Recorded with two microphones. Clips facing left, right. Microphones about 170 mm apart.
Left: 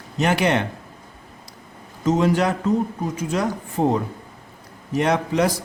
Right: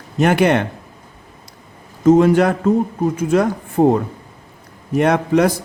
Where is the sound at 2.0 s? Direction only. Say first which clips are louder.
Right 7 dB; 55° right (ahead or behind).